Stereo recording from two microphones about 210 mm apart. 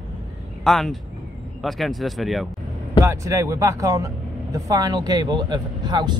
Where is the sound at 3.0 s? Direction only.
15° right (ahead or behind).